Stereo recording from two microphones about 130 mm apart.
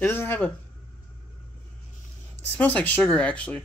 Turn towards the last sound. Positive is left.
turn(degrees=10)  # may be behind; listen again after turning